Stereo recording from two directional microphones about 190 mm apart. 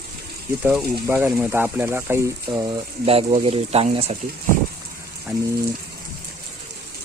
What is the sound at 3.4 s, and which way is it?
Speech, 30° right (ahead or behind).